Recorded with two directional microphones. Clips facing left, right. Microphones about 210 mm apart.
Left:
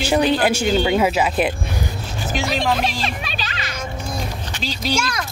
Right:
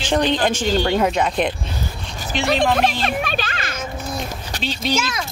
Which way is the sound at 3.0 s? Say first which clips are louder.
Right 5 dB; 50° right (ahead or behind).